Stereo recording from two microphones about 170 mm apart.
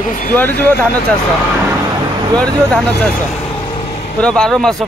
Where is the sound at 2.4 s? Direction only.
5° left (ahead or behind).